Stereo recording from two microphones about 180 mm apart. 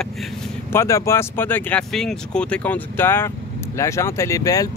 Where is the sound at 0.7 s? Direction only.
15° left (ahead or behind).